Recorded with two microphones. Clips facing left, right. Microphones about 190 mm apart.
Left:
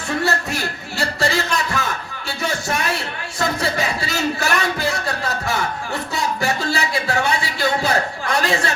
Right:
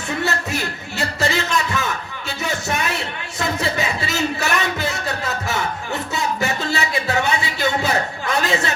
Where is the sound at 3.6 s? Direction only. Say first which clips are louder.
Even; 20° right (ahead or behind).